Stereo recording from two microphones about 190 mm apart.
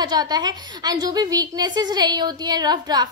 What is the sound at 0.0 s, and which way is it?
A woman's voice, 20° right (ahead or behind).